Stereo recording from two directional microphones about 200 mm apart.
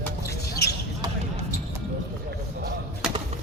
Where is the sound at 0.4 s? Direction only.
50° left (ahead or behind).